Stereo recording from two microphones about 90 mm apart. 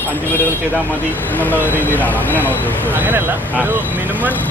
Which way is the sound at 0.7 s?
20° left (ahead or behind).